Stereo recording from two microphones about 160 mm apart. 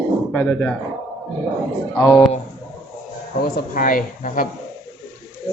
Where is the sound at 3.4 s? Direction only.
60° left (ahead or behind).